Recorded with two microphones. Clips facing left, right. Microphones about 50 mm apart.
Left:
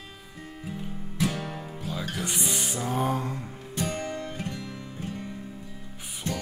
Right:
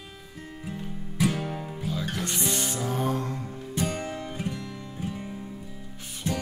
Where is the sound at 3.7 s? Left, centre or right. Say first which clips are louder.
Right 1 dB; centre.